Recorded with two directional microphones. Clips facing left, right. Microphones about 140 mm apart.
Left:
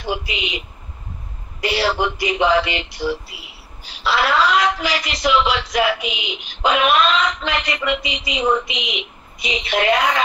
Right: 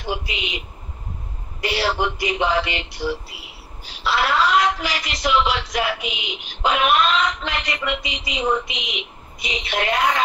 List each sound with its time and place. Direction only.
0.0 s a woman's voice: 90° left
1.6 s a woman's voice: 90° left